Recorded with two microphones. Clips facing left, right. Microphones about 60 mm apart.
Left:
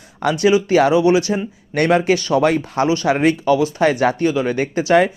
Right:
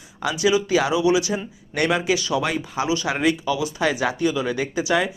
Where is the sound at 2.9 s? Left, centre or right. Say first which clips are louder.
Left 5 dB; left.